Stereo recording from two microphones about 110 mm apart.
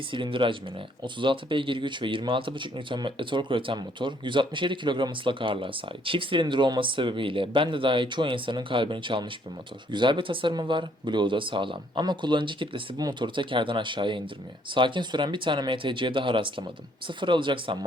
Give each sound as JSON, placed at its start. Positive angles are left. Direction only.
{"t": 0.1, "sound": "speech", "side_deg": -50}